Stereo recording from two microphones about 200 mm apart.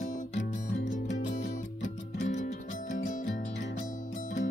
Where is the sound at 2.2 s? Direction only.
35° left (ahead or behind).